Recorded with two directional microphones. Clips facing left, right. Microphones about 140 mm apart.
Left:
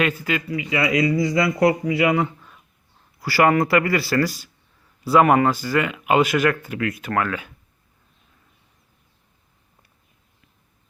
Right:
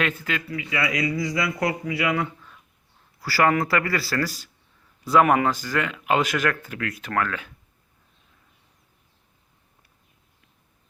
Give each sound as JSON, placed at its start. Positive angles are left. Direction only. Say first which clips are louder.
{"t": 0.0, "sound": "speech", "louder": "left 4 dB", "side_deg": 10}